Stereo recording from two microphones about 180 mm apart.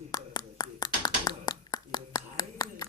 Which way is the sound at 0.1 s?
20° left (ahead or behind).